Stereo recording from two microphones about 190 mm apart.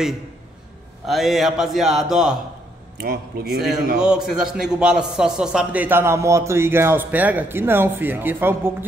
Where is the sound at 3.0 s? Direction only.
55° right (ahead or behind).